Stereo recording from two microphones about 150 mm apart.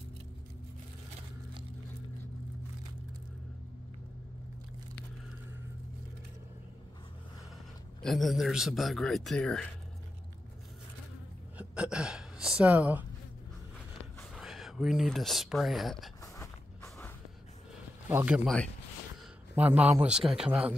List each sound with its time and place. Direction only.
8.0 s speech: centre (ahead or behind)
11.5 s a sound: 5° right (ahead or behind)
14.3 s speech: centre (ahead or behind)
16.2 s a sound: 20° left (ahead or behind)
18.0 s a man's voice: 10° right (ahead or behind)
19.5 s a man's voice: 10° right (ahead or behind)